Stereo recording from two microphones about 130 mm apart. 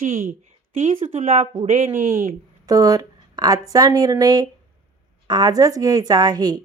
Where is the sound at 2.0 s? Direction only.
90° right.